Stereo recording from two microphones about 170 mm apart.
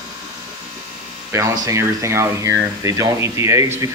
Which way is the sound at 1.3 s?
20° right (ahead or behind).